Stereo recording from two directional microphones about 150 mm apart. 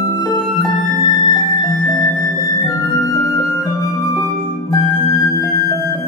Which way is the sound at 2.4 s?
25° left (ahead or behind).